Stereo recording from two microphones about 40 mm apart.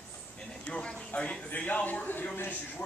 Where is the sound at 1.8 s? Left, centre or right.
Left.